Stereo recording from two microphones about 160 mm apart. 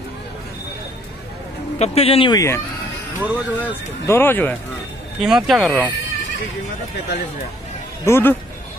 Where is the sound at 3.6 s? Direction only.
15° left (ahead or behind).